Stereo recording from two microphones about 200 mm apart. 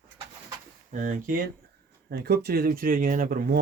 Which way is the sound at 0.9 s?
40° right (ahead or behind).